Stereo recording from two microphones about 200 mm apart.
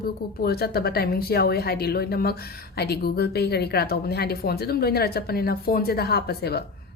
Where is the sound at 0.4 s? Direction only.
50° left (ahead or behind).